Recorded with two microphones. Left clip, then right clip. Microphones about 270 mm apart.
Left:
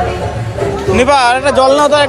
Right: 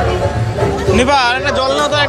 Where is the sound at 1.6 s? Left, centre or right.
Centre.